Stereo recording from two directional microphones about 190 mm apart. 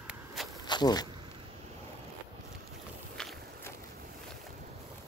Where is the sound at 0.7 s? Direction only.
20° left (ahead or behind).